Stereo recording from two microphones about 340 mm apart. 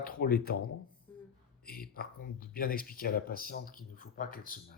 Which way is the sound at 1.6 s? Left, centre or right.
Left.